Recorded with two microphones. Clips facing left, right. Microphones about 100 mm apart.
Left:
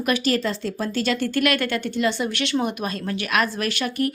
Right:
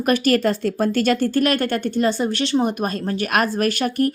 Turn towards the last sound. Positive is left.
turn(degrees=-45)  # may be behind; listen again after turning